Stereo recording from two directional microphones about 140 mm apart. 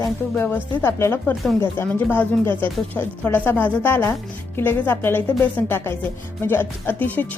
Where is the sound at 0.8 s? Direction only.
20° left (ahead or behind).